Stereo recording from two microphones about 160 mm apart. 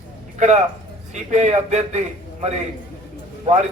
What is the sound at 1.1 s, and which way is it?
Speech, 45° right (ahead or behind).